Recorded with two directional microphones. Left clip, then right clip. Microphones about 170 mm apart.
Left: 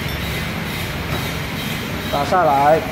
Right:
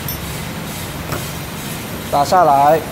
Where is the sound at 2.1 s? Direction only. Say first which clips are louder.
Right 4 dB; 40° right (ahead or behind).